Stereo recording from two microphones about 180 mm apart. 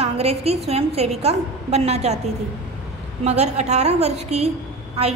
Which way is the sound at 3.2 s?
35° right (ahead or behind).